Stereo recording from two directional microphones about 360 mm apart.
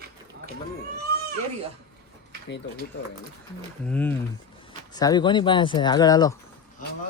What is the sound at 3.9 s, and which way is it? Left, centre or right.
Speech, centre.